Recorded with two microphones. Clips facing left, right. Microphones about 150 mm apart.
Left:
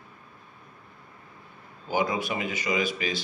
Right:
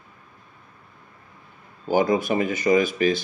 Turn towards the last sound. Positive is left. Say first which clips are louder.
# right 9 dB
turn(degrees=-50)  # may be behind; listen again after turning